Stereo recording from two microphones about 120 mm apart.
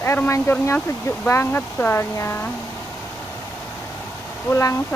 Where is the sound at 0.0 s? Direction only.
20° left (ahead or behind).